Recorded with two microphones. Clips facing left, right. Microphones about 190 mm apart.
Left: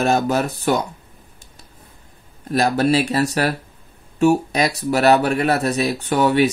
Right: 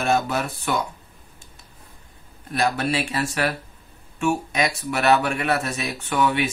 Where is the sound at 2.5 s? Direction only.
40° left (ahead or behind).